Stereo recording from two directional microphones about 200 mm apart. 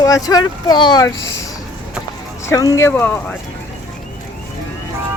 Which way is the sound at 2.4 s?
15° left (ahead or behind).